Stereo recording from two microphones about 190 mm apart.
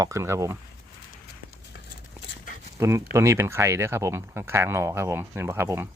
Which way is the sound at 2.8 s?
15° right (ahead or behind).